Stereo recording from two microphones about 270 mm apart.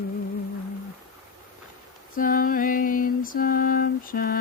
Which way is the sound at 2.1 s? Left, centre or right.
Left.